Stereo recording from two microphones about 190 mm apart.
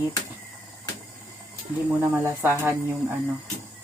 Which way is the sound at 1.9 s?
10° right (ahead or behind).